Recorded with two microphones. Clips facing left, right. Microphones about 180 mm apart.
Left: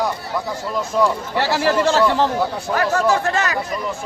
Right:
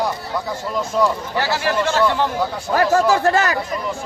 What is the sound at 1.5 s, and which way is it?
Speech, 35° left (ahead or behind).